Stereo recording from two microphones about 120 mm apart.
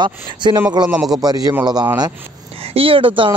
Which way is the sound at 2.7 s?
50° right (ahead or behind).